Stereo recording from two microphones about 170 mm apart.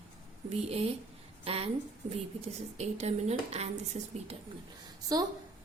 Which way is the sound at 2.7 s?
40° right (ahead or behind).